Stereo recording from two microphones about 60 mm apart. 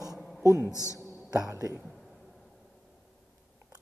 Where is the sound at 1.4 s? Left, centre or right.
Right.